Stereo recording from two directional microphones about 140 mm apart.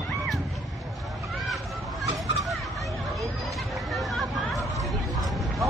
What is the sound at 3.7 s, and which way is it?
Hubbub, centre (ahead or behind).